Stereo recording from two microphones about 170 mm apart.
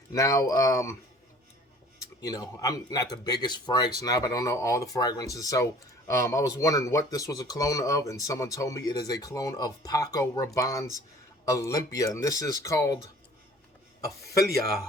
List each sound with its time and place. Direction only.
0.1 s speech: 20° left (ahead or behind)
2.2 s speech: 20° left (ahead or behind)